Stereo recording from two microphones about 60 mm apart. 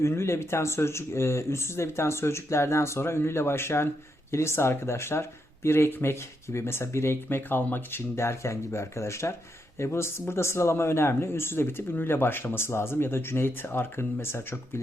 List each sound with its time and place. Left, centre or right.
0.0 s speech: left